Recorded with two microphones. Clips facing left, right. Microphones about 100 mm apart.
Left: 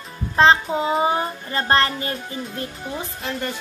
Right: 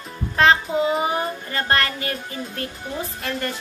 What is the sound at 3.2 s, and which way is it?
Speech, 15° left (ahead or behind).